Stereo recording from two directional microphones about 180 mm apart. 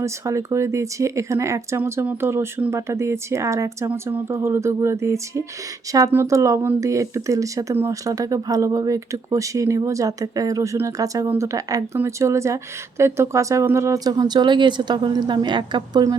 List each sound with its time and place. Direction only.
0.0 s speech: 15° right (ahead or behind)